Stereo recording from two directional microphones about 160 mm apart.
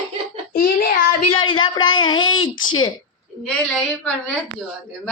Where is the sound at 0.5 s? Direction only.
70° left (ahead or behind).